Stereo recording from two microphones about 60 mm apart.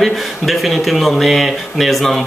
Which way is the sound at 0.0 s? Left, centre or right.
Centre.